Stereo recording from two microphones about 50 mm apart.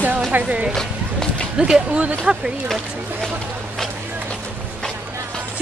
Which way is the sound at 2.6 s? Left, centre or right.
Centre.